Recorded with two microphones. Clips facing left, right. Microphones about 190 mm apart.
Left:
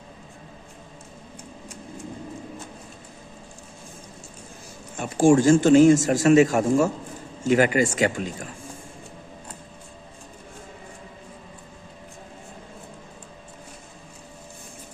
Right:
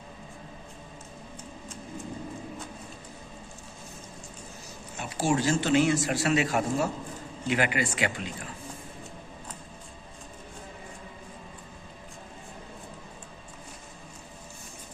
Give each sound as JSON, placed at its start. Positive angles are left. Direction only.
{"t": 4.9, "sound": "speech", "side_deg": 50}